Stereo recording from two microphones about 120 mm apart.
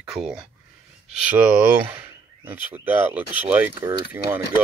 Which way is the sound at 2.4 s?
15° right (ahead or behind).